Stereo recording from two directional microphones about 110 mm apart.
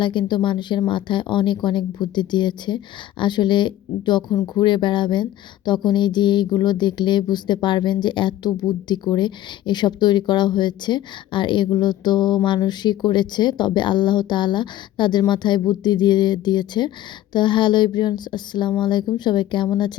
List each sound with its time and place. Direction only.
0.0 s speech: 45° left (ahead or behind)